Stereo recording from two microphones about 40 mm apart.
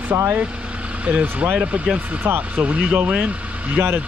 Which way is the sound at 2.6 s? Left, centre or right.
Right.